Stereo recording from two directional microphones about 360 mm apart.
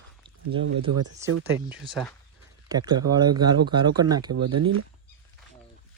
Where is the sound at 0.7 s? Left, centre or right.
Right.